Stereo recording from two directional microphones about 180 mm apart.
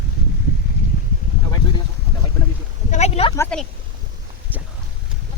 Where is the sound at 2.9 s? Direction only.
35° left (ahead or behind).